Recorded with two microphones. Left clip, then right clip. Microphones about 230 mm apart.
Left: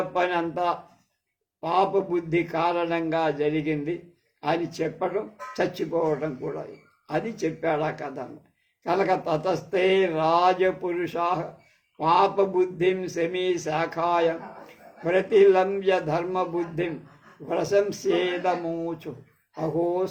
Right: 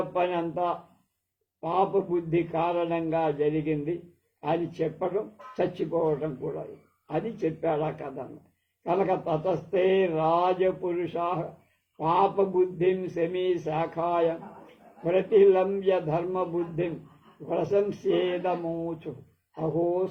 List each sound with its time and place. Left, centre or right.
0.1 s a man's voice: left
16.3 s a man's voice: left